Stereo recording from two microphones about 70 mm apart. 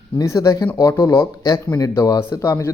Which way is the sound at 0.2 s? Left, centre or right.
Left.